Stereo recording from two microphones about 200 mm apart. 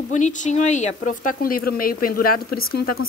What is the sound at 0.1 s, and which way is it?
A woman's voice, 40° left (ahead or behind).